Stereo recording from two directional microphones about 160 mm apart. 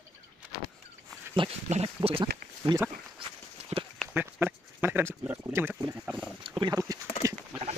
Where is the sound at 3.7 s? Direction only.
40° right (ahead or behind).